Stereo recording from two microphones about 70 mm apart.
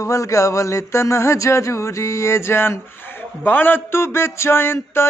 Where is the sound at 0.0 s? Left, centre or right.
Left.